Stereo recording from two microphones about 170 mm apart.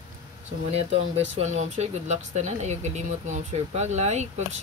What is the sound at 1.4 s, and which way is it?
Speech, 40° right (ahead or behind).